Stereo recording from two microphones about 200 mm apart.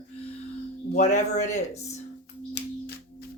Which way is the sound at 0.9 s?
35° left (ahead or behind).